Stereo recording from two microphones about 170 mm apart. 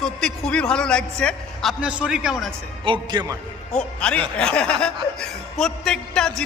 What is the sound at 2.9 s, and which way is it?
Speech, 25° right (ahead or behind).